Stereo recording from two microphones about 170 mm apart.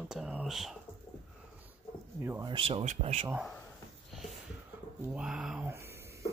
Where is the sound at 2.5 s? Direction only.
35° right (ahead or behind).